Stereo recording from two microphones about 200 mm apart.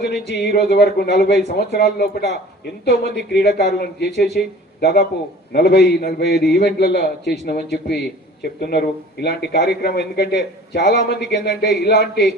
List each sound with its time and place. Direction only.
0.0 s a man's voice: 55° left (ahead or behind)